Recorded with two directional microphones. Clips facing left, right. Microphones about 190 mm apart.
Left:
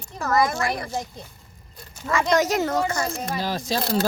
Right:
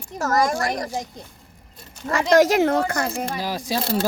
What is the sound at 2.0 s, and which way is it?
Speech, 40° right (ahead or behind).